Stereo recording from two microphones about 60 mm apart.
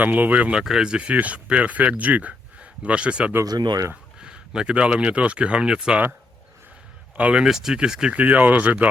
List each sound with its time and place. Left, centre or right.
0.0 s speech: right
0.6 s a man's voice: centre
3.4 s speech: right
4.2 s speech: centre
7.2 s speech: right
7.4 s speech: centre; by 8.9 s right